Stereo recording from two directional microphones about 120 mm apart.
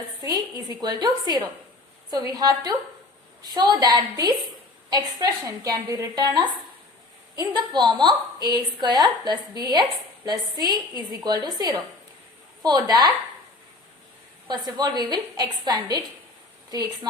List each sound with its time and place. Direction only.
0.2 s a woman's voice: 30° right (ahead or behind)
14.4 s a woman's voice: 35° right (ahead or behind)